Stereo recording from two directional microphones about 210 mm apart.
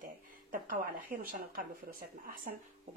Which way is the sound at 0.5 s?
40° right (ahead or behind).